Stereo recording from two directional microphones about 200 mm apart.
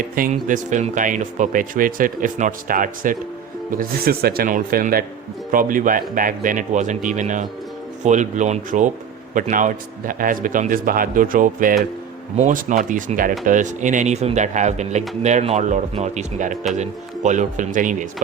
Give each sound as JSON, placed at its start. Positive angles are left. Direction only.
{"t": 0.2, "sound": "a man's voice", "side_deg": -40}